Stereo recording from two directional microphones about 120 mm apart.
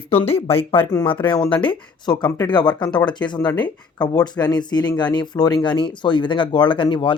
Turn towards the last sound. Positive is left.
turn(degrees=40)  # may be behind; listen again after turning